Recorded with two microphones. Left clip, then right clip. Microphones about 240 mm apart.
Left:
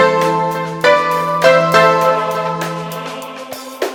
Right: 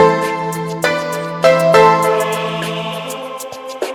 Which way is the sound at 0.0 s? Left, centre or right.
Centre.